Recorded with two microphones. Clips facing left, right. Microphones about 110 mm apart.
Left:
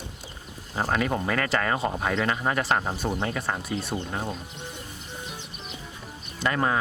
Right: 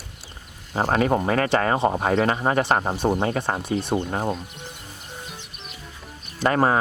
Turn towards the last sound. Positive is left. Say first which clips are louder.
# right 5 dB
turn(degrees=-40)  # may be behind; listen again after turning